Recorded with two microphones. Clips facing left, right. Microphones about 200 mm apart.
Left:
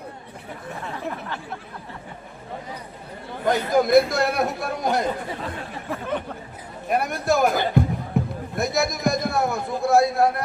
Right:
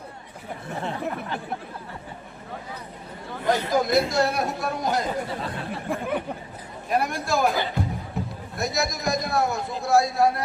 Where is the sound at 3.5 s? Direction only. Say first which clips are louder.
Left 4 dB; 55° left (ahead or behind).